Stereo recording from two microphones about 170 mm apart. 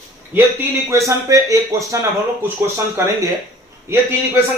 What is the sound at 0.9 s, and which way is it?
Speech, 20° right (ahead or behind).